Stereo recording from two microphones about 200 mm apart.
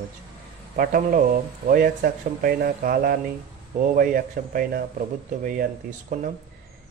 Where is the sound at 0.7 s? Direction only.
45° right (ahead or behind).